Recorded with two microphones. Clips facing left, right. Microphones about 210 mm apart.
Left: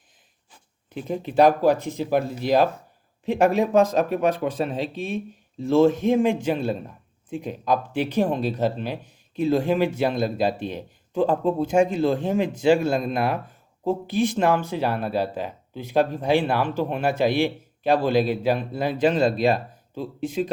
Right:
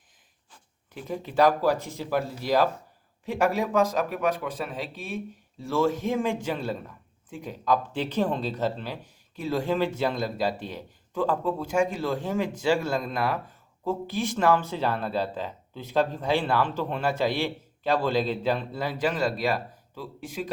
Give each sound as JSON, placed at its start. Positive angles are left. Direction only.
{"t": 0.9, "sound": "speech", "side_deg": 20}